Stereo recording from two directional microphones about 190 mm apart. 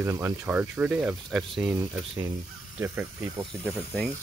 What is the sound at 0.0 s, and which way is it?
Speech, 15° right (ahead or behind).